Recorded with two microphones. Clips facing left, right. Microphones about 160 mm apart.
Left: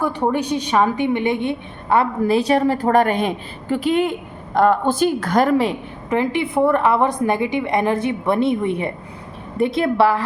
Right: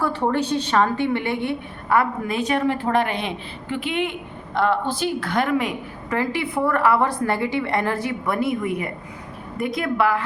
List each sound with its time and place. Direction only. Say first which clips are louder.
0.0 s a woman's voice: left 2 dB; 15° left (ahead or behind); by 5.7 s 35° left (ahead or behind)
6.1 s a woman's voice: left 4 dB; 20° left (ahead or behind)